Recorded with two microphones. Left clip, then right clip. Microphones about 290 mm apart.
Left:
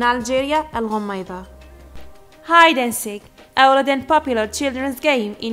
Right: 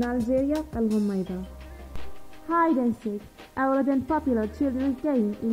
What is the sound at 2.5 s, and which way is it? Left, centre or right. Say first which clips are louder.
A woman's voice: left 11 dB; centre.